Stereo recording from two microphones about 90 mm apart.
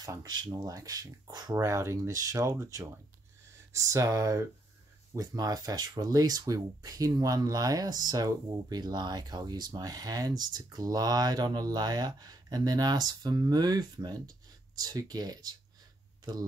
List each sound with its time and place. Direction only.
0.0 s speech: 40° right (ahead or behind)
1.6 s speech: 30° right (ahead or behind)